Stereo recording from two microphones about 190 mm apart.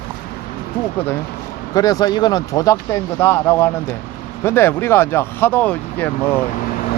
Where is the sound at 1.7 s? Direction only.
20° left (ahead or behind).